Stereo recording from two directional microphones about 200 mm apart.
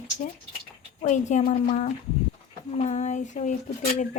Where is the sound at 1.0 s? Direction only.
35° left (ahead or behind).